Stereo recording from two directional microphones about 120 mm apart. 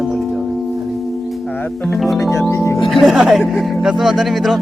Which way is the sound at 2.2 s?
25° left (ahead or behind).